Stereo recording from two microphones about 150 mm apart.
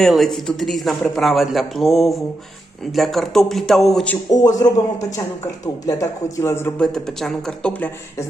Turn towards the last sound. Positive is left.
turn(degrees=10)  # may be behind; listen again after turning